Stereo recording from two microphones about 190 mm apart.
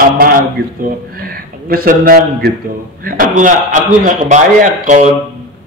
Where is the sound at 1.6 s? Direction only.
45° right (ahead or behind).